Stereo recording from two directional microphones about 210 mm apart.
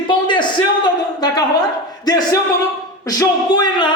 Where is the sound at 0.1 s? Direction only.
20° left (ahead or behind).